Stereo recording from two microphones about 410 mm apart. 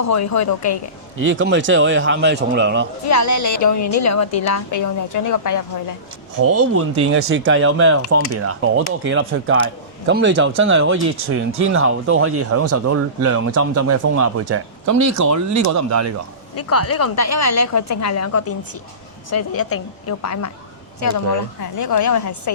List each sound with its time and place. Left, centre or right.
0.0 s speech: left
1.2 s speech: right
3.1 s a woman's voice: left
6.4 s speech: right
16.6 s speech: left
21.6 s a woman's voice: left